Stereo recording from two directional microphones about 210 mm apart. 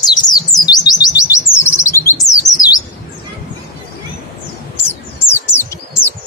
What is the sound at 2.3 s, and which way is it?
Bird, 15° left (ahead or behind).